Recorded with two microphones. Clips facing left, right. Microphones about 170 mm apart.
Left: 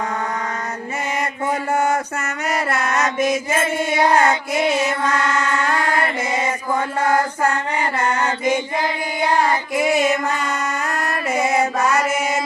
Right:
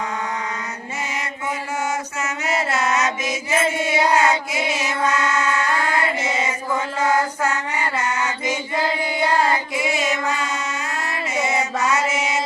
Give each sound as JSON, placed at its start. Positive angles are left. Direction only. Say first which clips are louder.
{"t": 1.7, "sound": "mantra", "louder": "left 6 dB", "side_deg": 55}
{"t": 8.0, "sound": "mantra", "louder": "left 4 dB", "side_deg": 55}
{"t": 10.2, "sound": "a sound", "louder": "left 2 dB", "side_deg": 55}
{"t": 11.6, "sound": "mantra", "louder": "left 3 dB", "side_deg": 55}